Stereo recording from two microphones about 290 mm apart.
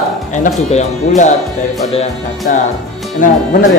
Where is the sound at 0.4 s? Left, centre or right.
Left.